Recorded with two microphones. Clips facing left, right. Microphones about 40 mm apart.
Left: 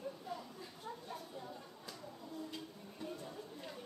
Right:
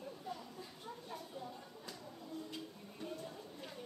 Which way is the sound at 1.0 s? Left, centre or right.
Centre.